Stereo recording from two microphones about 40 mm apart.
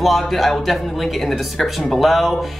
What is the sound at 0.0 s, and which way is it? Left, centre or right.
Speech, centre.